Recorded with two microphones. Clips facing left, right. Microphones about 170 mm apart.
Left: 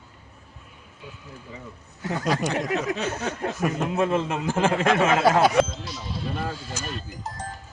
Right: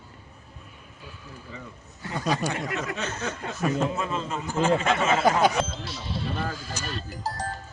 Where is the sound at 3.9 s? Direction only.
65° left (ahead or behind); by 4.5 s 85° left.